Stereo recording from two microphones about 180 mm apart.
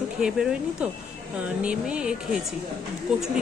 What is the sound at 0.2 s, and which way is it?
Speech, 5° right (ahead or behind).